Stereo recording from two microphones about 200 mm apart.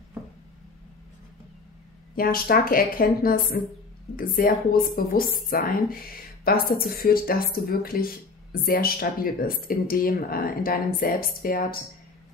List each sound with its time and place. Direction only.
2.1 s speech: 45° left (ahead or behind)